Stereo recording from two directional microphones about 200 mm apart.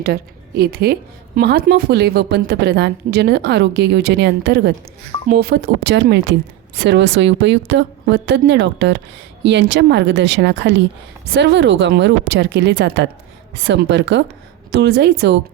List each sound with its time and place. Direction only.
0.0 s a woman's voice: 50° right (ahead or behind)